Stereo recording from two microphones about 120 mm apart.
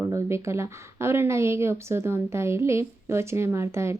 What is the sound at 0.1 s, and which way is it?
A woman's voice, 25° right (ahead or behind).